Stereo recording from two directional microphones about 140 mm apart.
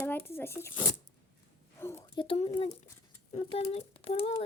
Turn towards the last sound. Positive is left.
turn(degrees=45)  # may be behind; listen again after turning